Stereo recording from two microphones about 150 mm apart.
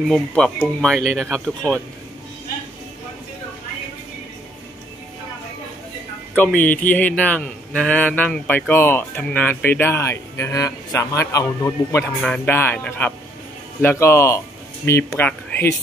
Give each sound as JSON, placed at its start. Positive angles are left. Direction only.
{"t": 0.1, "sound": "speech", "side_deg": 5}
{"t": 6.3, "sound": "speech", "side_deg": 10}